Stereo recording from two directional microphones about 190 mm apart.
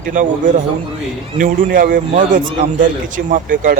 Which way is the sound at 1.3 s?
45° right (ahead or behind).